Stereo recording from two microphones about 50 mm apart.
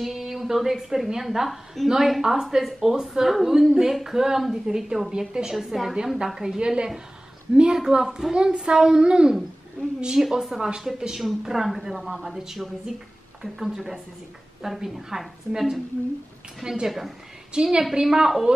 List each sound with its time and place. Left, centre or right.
0.0 s a woman's voice: centre
10.4 s a woman's voice: centre